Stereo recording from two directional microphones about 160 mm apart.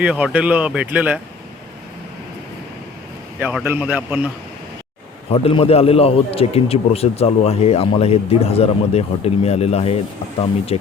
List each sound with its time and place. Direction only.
0.0 s speech: 10° right (ahead or behind)
3.4 s speech: 10° right (ahead or behind)
5.3 s a man's voice: 35° left (ahead or behind)